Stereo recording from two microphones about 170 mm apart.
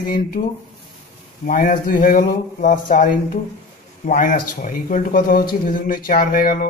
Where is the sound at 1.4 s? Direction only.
55° left (ahead or behind).